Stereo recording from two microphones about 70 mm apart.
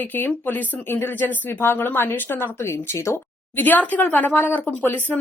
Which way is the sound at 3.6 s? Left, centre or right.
Left.